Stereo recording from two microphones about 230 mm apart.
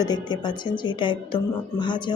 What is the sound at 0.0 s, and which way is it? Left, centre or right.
A woman's voice, centre.